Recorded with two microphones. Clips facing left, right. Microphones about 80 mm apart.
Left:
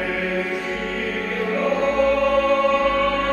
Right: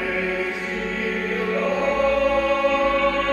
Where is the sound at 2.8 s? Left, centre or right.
Centre.